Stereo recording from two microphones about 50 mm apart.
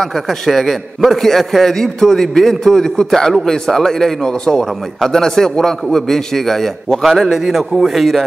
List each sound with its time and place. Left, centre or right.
0.0 s a man's voice: centre